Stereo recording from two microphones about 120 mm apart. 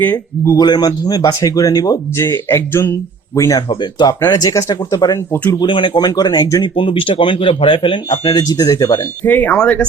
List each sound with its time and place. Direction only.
0.0 s speech: 15° left (ahead or behind)
0.5 s speech: 35° left (ahead or behind)
3.7 s speech: 40° left (ahead or behind)
5.5 s speech: 40° left (ahead or behind)
9.2 s speech: 15° left (ahead or behind)